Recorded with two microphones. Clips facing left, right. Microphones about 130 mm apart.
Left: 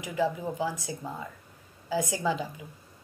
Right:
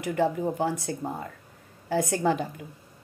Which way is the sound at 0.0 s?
60° right (ahead or behind).